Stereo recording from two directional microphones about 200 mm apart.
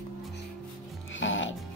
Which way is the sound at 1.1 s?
70° left (ahead or behind).